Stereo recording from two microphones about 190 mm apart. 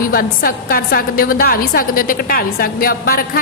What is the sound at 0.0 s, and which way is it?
A woman's voice, 50° left (ahead or behind).